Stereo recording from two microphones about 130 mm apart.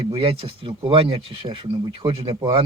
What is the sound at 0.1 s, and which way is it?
Speech, 45° right (ahead or behind).